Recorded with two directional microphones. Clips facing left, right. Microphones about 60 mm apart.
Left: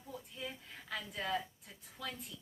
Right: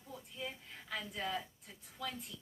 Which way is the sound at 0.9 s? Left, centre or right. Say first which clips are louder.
Even; centre.